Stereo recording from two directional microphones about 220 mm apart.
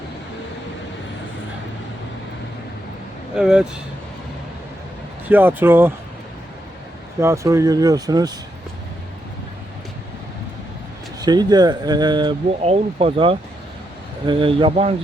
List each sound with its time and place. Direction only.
3.3 s speech: 5° right (ahead or behind)
5.3 s speech: 10° right (ahead or behind)
7.2 s speech: 15° right (ahead or behind)
11.2 s speech: 20° right (ahead or behind)